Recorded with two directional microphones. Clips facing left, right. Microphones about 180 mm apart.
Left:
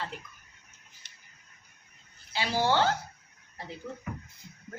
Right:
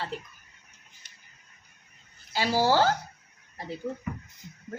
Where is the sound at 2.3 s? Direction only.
40° right (ahead or behind).